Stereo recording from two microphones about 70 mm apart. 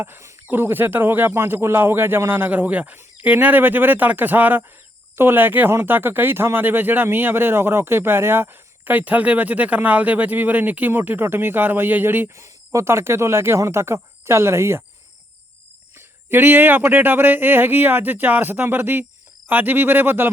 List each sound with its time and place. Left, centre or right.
0.0 s speech: right
0.5 s speech: right
12.4 s speech: right
16.0 s speech: right